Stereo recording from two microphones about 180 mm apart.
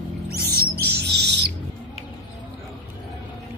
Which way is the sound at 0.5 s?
65° right (ahead or behind).